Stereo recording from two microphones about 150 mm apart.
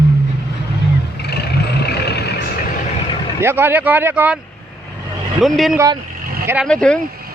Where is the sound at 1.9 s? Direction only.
90° left.